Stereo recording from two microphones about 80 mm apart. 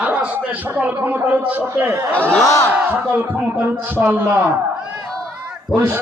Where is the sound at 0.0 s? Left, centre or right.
Centre.